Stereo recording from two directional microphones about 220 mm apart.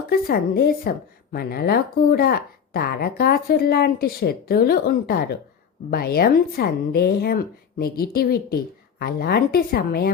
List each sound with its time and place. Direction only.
0.1 s a woman's voice: 45° left (ahead or behind)